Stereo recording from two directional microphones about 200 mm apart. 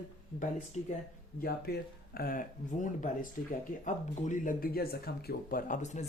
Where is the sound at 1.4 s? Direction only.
50° left (ahead or behind).